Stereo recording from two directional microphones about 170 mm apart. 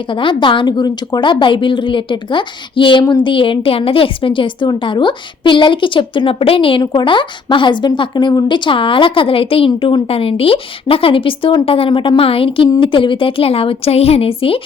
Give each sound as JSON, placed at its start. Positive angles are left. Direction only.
{"t": 0.1, "sound": "a woman's voice", "side_deg": 30}